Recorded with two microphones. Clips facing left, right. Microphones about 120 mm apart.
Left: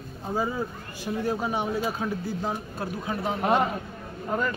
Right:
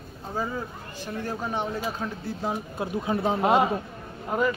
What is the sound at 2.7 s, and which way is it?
Speech, 20° right (ahead or behind).